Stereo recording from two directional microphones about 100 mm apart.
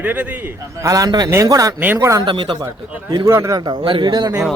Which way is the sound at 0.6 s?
30° right (ahead or behind).